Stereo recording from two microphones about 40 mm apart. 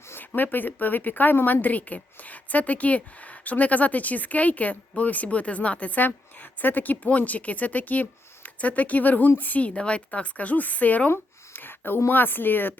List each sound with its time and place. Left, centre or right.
0.2 s speech: left
1.6 s a woman's voice: left
6.6 s speech: left
7.1 s a woman's voice: left
11.5 s speech: left